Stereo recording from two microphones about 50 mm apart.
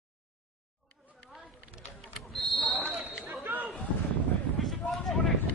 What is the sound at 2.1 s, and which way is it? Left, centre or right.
Basketball bounce, centre.